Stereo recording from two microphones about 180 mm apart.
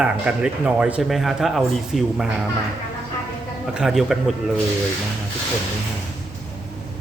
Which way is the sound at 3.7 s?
Centre (ahead or behind).